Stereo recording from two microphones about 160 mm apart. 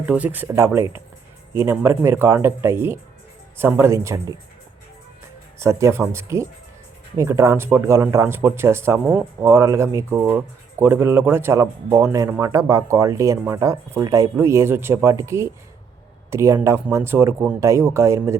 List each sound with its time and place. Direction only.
0.0 s speech: 10° right (ahead or behind)
5.5 s speech: 15° right (ahead or behind)